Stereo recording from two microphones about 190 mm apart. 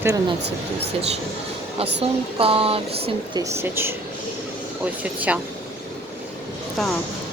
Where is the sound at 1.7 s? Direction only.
30° right (ahead or behind).